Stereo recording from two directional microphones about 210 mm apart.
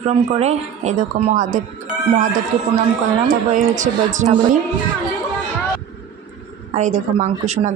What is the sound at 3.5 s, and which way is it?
Speech, 35° right (ahead or behind).